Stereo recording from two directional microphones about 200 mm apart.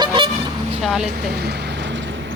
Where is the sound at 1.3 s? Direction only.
55° right (ahead or behind).